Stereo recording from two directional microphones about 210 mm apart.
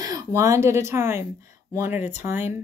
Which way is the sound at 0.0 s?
15° right (ahead or behind).